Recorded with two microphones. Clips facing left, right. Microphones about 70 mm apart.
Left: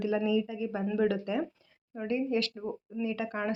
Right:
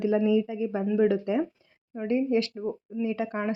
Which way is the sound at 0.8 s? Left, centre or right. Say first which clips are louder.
Right 5 dB; right.